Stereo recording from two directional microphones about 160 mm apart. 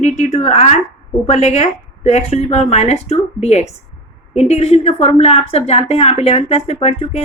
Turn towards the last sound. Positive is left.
turn(degrees=40)  # may be behind; listen again after turning